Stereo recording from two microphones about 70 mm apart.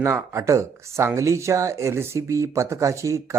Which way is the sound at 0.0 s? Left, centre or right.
Right.